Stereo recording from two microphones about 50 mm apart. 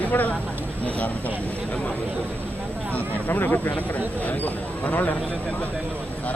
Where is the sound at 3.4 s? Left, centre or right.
Left.